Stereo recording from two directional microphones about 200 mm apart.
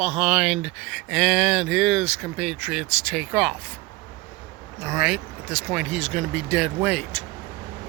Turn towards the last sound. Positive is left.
turn(degrees=0)  # may be behind; listen again after turning